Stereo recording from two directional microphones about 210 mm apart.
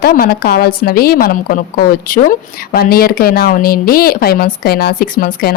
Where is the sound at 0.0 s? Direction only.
45° left (ahead or behind).